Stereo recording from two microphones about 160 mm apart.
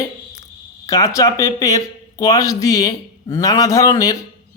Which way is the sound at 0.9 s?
20° left (ahead or behind).